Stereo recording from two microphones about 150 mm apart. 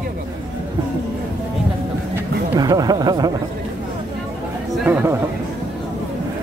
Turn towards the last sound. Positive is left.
turn(degrees=-15)  # may be behind; listen again after turning